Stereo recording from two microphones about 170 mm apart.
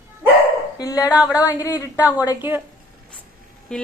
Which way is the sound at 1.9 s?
10° right (ahead or behind).